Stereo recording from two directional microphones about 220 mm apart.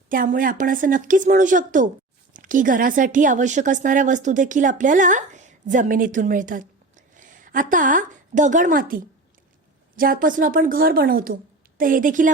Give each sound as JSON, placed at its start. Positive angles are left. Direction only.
{"t": 0.1, "sound": "speech", "side_deg": -40}